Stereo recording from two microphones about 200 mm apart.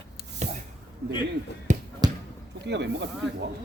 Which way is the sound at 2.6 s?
60° right (ahead or behind).